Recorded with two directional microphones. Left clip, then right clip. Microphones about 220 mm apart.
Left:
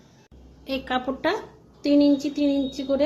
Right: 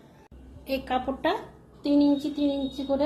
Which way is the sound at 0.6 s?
15° left (ahead or behind).